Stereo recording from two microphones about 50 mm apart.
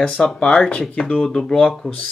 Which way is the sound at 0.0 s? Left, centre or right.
Centre.